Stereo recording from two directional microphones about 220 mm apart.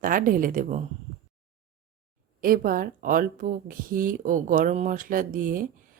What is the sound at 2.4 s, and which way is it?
Speech, 40° right (ahead or behind).